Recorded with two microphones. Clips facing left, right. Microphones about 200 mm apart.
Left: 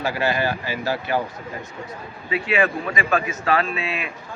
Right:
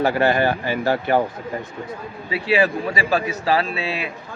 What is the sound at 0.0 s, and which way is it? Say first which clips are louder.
Speech: right 5 dB; 55° right (ahead or behind).